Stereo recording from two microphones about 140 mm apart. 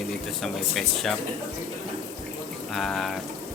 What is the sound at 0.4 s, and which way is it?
Speech, centre (ahead or behind).